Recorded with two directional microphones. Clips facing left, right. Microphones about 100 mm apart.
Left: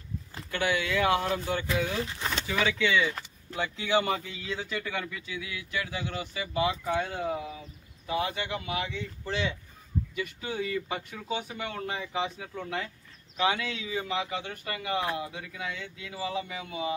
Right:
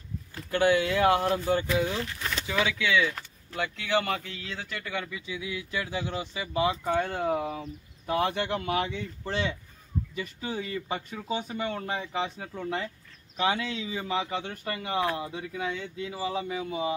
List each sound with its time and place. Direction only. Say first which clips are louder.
0.5 s a man's voice: right 5 dB; 40° right (ahead or behind)
2.6 s speech: even; centre (ahead or behind)
5.1 s speech: right 3 dB; 25° right (ahead or behind)
6.8 s speech: right 2 dB; 50° right (ahead or behind)
10.1 s a man's voice: even; 35° right (ahead or behind)